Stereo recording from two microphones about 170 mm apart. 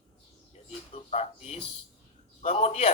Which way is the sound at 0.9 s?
40° left (ahead or behind).